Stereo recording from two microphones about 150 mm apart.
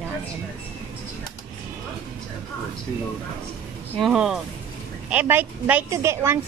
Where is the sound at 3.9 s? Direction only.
Centre (ahead or behind); by 6.4 s 20° right (ahead or behind).